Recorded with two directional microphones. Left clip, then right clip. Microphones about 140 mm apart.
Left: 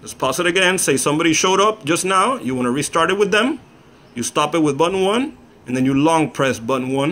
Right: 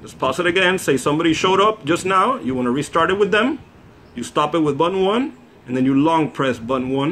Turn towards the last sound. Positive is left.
turn(degrees=45)  # may be behind; listen again after turning